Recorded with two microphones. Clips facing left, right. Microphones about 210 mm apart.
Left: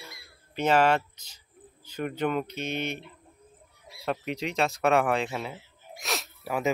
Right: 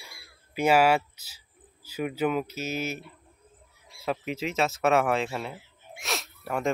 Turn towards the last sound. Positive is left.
turn(degrees=5)  # may be behind; listen again after turning